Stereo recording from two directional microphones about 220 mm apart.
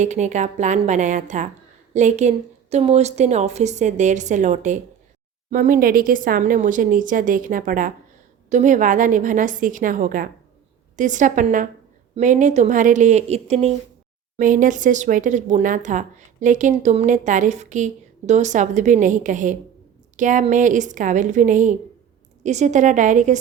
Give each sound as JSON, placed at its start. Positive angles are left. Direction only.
{"t": 0.0, "sound": "speech", "side_deg": -35}